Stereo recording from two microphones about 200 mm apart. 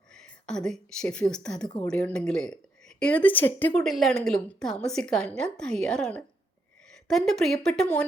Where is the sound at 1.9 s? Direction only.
5° left (ahead or behind).